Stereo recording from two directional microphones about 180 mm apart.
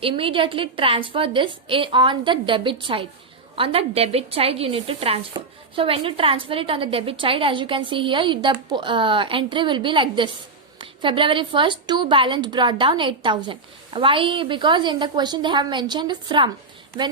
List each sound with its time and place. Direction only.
0.0 s a woman's voice: 30° right (ahead or behind)